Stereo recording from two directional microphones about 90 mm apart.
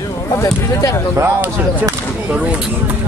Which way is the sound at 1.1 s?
25° right (ahead or behind).